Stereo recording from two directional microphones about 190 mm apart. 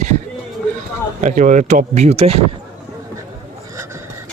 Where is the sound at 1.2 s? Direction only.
40° right (ahead or behind).